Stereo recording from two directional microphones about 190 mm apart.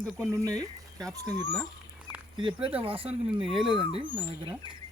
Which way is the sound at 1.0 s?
5° left (ahead or behind).